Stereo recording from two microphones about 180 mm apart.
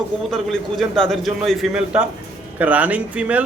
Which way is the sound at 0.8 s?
Centre (ahead or behind).